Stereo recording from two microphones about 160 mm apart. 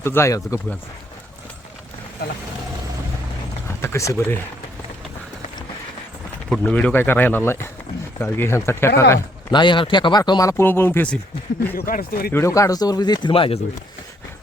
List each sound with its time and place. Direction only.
0.0 s speech: 15° left (ahead or behind)
3.8 s speech: 15° left (ahead or behind)
6.5 s speech: 10° left (ahead or behind)
9.5 s speech: 30° left (ahead or behind)
10.6 s speech: 15° left (ahead or behind)
11.7 s speech: 65° left (ahead or behind)
12.3 s speech: 20° left (ahead or behind); by 13.6 s 35° left (ahead or behind)